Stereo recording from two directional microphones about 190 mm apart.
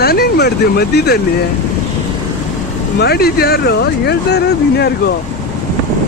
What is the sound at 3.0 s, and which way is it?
Speech, 55° left (ahead or behind).